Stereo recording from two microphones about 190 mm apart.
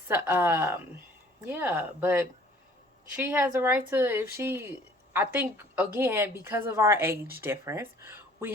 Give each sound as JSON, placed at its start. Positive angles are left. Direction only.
{"t": 0.1, "sound": "speech", "side_deg": -10}